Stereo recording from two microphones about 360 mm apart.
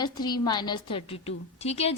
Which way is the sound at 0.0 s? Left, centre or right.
Centre.